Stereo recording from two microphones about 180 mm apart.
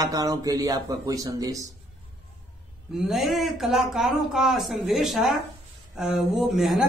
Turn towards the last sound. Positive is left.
turn(degrees=0)  # may be behind; listen again after turning